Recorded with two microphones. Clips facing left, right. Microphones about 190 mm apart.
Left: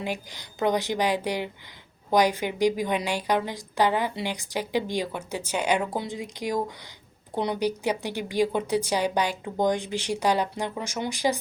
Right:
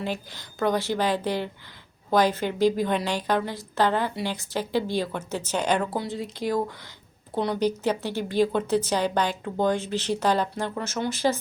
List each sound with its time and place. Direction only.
0.0 s a woman's voice: 15° left (ahead or behind)